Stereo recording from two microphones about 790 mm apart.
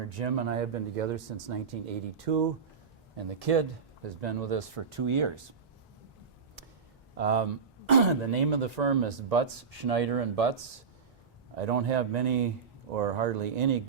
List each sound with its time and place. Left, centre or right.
0.1 s speech: right
3.2 s speech: right
7.2 s speech: right